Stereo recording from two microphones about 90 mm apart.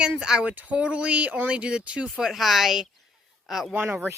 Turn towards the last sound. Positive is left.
turn(degrees=-20)  # may be behind; listen again after turning